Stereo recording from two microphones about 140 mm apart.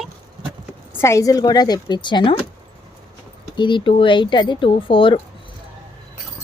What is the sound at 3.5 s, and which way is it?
Speech, 35° left (ahead or behind).